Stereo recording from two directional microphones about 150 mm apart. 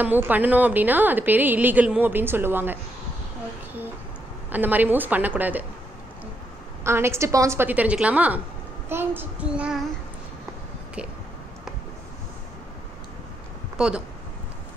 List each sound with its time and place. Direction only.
0.0 s a woman's voice: 10° right (ahead or behind)
4.5 s a woman's voice: 10° right (ahead or behind)
6.8 s a woman's voice: 15° right (ahead or behind)
13.7 s speech: 5° right (ahead or behind)